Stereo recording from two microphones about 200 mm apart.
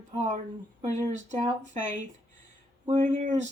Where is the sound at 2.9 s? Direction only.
40° right (ahead or behind).